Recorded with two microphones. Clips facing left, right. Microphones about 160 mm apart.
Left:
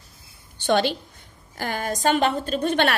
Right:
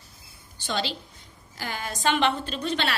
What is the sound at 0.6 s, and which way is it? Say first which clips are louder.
A woman's voice: left 9 dB; 55° left (ahead or behind).